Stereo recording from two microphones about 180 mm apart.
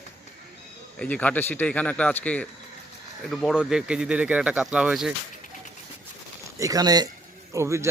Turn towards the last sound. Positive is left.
turn(degrees=-15)  # may be behind; listen again after turning